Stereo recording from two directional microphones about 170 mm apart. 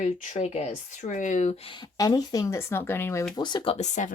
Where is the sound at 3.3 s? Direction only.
25° left (ahead or behind); by 4.1 s 45° left (ahead or behind).